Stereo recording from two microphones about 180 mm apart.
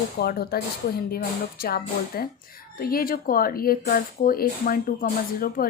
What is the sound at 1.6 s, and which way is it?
Speech, 60° left (ahead or behind).